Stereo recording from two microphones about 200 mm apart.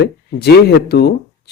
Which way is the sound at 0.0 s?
55° left (ahead or behind).